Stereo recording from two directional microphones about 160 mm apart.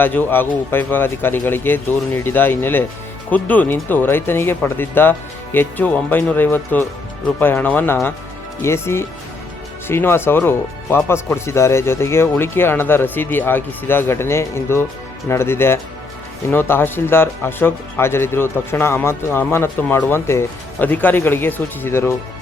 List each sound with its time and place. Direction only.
0.0 s speech: 10° left (ahead or behind)